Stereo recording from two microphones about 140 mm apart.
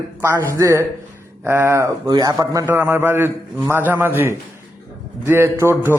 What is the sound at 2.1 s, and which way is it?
Speech, 30° right (ahead or behind).